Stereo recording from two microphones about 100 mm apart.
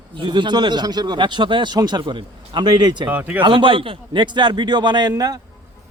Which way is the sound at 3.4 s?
55° right (ahead or behind).